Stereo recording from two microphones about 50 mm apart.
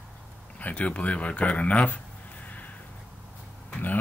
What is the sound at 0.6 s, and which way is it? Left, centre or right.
Speech, left.